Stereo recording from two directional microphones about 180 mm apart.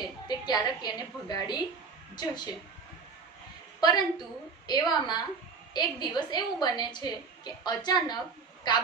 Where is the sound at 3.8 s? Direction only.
20° left (ahead or behind).